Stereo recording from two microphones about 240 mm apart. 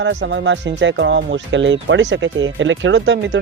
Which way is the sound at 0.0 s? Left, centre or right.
Right.